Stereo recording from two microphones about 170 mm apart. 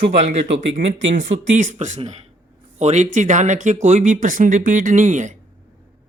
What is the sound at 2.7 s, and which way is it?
Speech, 40° right (ahead or behind).